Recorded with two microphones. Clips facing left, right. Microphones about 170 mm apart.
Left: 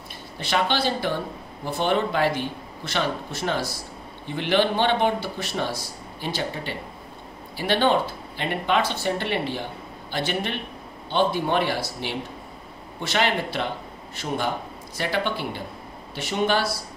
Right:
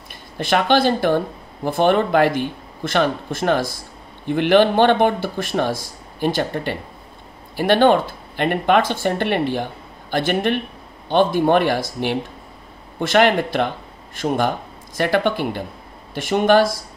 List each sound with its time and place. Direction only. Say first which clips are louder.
0.4 s speech: right 7 dB; 50° right (ahead or behind)